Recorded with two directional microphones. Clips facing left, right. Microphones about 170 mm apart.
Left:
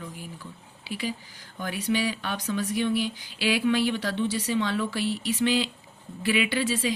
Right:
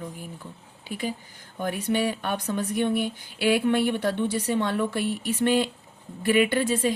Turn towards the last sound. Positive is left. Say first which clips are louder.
# right 4 dB
turn(degrees=-55)  # may be behind; listen again after turning